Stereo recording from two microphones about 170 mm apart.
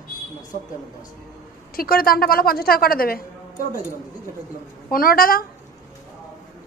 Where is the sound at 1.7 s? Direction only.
60° left (ahead or behind).